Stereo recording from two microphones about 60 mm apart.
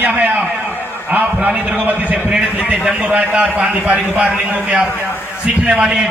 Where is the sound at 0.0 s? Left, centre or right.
Right.